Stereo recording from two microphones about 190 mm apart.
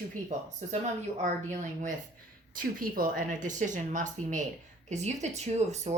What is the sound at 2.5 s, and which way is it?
Speech, 50° right (ahead or behind).